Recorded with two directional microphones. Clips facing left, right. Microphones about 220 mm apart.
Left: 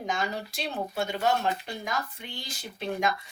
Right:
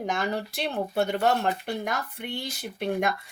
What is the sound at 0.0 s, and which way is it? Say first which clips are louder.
Speech: right 3 dB; 60° right (ahead or behind).